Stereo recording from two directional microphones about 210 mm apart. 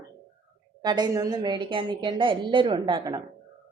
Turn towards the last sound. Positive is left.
turn(degrees=-20)  # may be behind; listen again after turning